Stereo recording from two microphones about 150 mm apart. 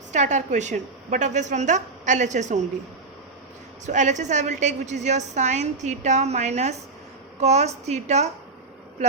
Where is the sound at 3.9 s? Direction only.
55° right (ahead or behind).